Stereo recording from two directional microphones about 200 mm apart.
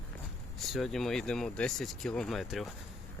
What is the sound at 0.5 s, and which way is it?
Speech, centre (ahead or behind).